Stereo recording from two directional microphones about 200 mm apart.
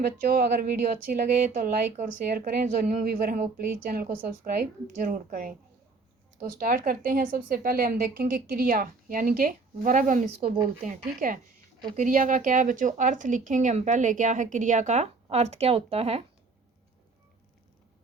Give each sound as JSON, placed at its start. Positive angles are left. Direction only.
{"t": 0.0, "sound": "a woman's voice", "side_deg": -45}
{"t": 11.9, "sound": "a woman's voice", "side_deg": -40}